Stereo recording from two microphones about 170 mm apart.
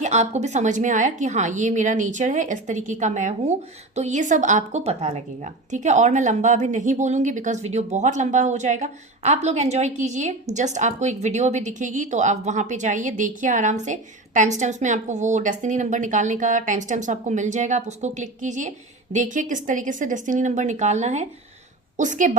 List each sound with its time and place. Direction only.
0.0 s a woman's voice: 40° right (ahead or behind)